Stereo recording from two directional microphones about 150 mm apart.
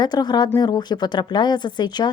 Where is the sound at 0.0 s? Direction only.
30° left (ahead or behind).